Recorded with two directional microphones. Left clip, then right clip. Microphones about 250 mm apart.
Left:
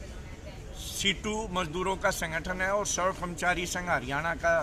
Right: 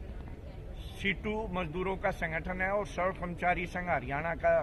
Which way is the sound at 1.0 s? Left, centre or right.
Centre.